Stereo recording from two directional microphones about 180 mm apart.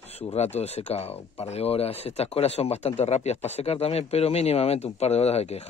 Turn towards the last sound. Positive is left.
turn(degrees=35)  # may be behind; listen again after turning